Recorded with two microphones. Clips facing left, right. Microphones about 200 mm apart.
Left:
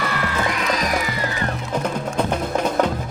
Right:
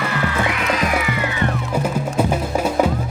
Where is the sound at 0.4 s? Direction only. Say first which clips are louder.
Right 2 dB; 35° left (ahead or behind).